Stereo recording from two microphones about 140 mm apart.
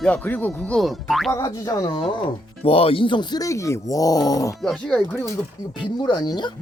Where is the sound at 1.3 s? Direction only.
25° left (ahead or behind).